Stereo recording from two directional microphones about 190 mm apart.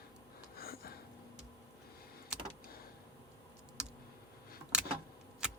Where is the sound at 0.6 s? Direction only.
50° left (ahead or behind).